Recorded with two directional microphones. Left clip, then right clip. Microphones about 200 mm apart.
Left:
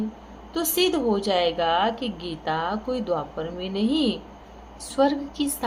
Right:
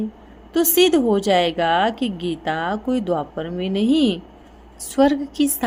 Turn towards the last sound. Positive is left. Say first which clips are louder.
# right 4 dB
turn(degrees=-50)  # may be behind; listen again after turning